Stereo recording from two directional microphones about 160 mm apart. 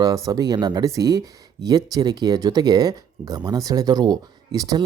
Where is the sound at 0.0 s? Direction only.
25° right (ahead or behind).